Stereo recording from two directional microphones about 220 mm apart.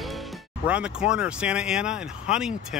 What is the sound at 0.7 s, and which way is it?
Speech, 5° right (ahead or behind).